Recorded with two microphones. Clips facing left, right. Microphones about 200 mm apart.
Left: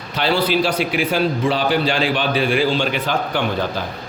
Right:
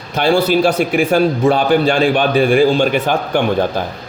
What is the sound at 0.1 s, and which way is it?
A man's voice, 45° right (ahead or behind).